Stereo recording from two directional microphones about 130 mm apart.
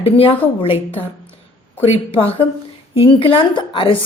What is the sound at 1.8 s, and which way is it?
A woman's voice, 45° left (ahead or behind).